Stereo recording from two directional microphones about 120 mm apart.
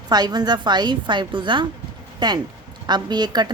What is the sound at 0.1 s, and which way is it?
A woman's voice, 35° right (ahead or behind).